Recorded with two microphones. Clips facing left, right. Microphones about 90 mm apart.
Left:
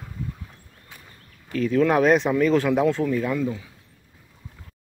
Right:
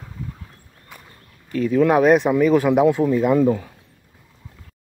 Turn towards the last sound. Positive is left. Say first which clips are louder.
# right 9 dB
turn(degrees=-50)  # may be behind; listen again after turning